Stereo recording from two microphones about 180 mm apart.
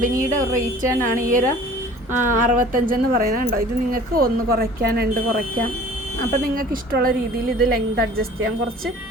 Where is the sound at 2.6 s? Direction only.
50° right (ahead or behind).